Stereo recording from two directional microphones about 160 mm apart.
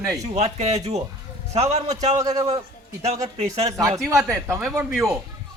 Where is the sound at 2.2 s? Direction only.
20° right (ahead or behind).